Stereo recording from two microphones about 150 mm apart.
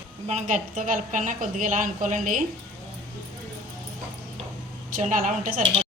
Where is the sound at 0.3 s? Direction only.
55° right (ahead or behind).